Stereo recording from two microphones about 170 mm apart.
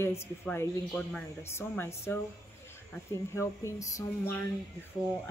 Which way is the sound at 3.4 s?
20° left (ahead or behind).